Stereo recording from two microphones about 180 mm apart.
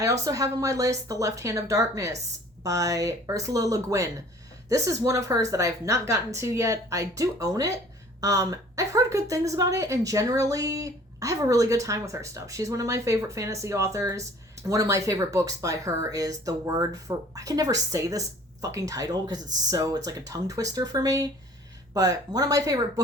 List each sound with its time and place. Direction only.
0.0 s speech: 20° right (ahead or behind)